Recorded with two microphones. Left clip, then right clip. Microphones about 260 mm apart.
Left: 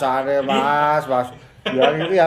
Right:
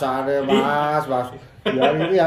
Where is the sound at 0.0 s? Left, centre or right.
Centre.